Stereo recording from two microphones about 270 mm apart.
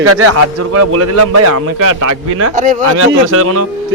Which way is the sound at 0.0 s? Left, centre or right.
Right.